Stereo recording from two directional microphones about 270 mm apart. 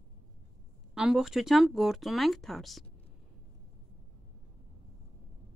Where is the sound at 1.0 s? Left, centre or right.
Centre.